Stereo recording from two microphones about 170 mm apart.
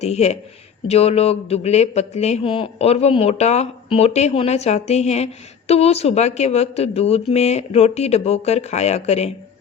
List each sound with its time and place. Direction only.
0.0 s a man's voice: 40° left (ahead or behind)